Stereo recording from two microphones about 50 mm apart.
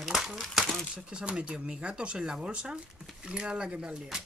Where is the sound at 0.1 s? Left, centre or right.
Centre.